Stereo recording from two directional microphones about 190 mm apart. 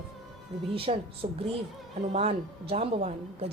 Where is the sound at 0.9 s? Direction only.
35° right (ahead or behind).